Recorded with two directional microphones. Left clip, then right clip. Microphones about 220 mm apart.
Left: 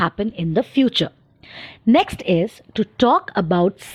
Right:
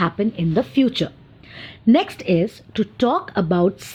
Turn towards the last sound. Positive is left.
turn(degrees=35)  # may be behind; listen again after turning